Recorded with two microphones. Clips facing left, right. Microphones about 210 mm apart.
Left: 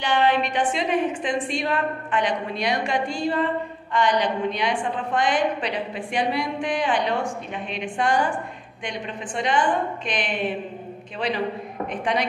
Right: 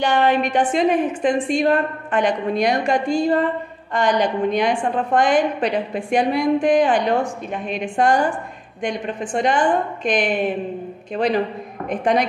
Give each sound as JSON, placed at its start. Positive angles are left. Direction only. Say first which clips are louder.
{"t": 0.0, "sound": "a woman's voice", "louder": "right 4 dB", "side_deg": -45}